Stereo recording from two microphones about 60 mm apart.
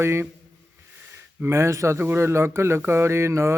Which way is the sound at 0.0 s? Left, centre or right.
Right.